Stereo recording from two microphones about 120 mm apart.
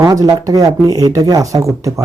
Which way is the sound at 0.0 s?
30° right (ahead or behind).